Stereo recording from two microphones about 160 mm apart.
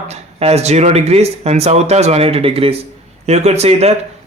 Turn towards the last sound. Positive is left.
turn(degrees=-40)  # may be behind; listen again after turning